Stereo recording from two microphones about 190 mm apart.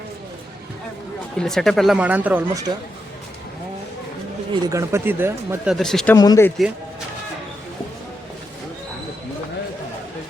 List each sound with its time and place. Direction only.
1.4 s speech: centre (ahead or behind)
4.6 s speech: 15° right (ahead or behind)
5.7 s speech: centre (ahead or behind)
6.1 s speech: 20° left (ahead or behind)